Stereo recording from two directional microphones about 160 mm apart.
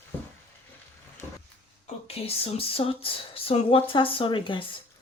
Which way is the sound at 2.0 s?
40° left (ahead or behind).